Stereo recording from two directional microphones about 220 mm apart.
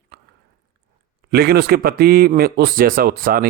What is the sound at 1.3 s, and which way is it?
A man's voice, 45° right (ahead or behind).